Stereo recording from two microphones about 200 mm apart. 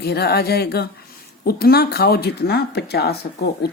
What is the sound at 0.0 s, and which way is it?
Speech, 55° left (ahead or behind).